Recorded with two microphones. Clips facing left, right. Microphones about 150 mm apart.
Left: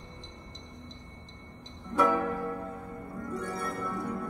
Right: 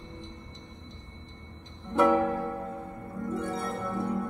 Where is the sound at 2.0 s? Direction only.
25° right (ahead or behind).